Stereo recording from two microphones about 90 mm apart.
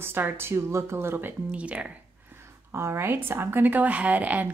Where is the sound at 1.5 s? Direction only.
15° right (ahead or behind).